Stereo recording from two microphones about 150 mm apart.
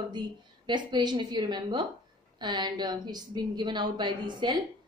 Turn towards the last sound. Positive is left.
turn(degrees=-30)  # may be behind; listen again after turning